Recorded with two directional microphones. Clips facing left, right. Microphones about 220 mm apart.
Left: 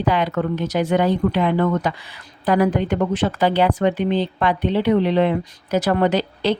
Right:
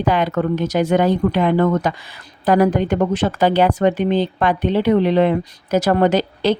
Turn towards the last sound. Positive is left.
turn(degrees=-45)  # may be behind; listen again after turning